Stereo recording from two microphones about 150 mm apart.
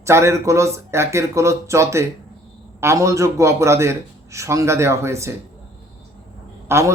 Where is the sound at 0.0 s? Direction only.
20° right (ahead or behind).